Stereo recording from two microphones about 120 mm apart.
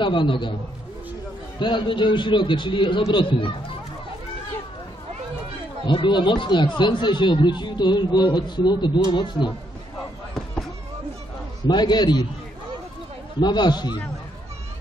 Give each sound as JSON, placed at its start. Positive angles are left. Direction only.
{"t": 0.0, "sound": "a man's voice", "side_deg": 40}
{"t": 1.6, "sound": "a man's voice", "side_deg": 40}
{"t": 5.9, "sound": "a man's voice", "side_deg": 40}
{"t": 11.6, "sound": "a man's voice", "side_deg": 35}
{"t": 13.4, "sound": "a man's voice", "side_deg": 35}